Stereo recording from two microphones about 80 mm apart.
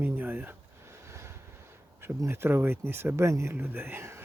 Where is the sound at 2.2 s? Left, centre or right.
Right.